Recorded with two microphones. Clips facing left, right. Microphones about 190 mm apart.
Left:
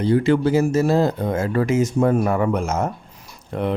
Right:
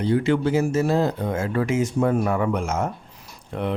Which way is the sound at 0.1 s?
40° left (ahead or behind).